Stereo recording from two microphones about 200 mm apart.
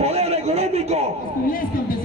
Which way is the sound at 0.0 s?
30° right (ahead or behind).